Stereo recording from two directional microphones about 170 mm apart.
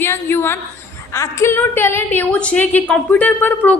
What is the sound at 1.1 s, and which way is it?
A woman's voice, 15° left (ahead or behind).